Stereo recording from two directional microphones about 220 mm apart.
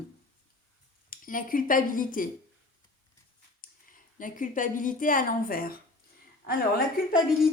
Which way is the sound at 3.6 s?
40° left (ahead or behind).